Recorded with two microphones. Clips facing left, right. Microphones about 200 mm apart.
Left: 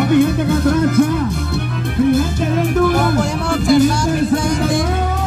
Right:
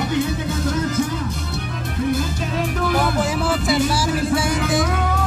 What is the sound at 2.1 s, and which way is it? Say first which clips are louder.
Music: left 7 dB; 55° left (ahead or behind).